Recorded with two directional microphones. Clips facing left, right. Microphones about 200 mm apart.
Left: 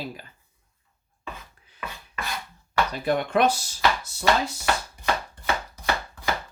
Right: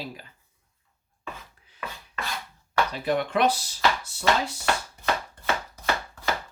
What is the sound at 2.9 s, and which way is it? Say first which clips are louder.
Speech: left 4 dB; 45° left (ahead or behind).